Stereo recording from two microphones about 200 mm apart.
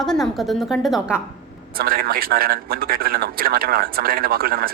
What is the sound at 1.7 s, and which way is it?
A man's voice, 50° right (ahead or behind).